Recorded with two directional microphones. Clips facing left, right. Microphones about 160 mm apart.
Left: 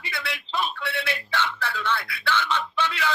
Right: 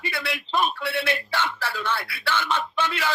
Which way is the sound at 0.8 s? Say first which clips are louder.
Right 4 dB; 45° right (ahead or behind).